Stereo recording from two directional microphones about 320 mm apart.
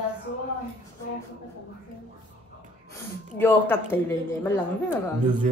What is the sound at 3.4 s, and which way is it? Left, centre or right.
Speech, centre.